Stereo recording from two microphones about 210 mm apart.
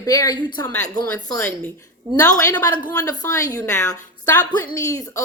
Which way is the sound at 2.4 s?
15° left (ahead or behind).